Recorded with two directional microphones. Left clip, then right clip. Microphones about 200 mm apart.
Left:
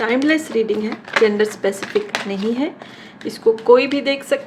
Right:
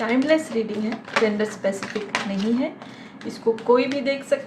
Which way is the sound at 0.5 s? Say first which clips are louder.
Left 7 dB; 55° left (ahead or behind).